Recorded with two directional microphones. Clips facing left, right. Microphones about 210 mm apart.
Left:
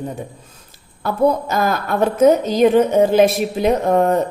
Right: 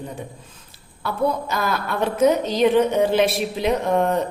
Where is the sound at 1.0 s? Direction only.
45° left (ahead or behind).